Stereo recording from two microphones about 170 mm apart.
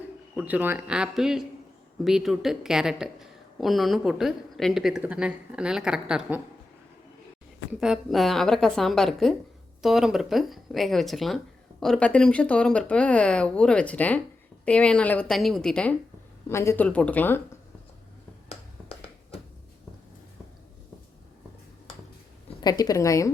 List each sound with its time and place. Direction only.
0.3 s a woman's voice: 10° right (ahead or behind)
7.7 s a woman's voice: 5° right (ahead or behind); by 17.6 s 15° left (ahead or behind)
18.4 s a sound: 40° left (ahead or behind)
22.6 s a woman's voice: 25° left (ahead or behind)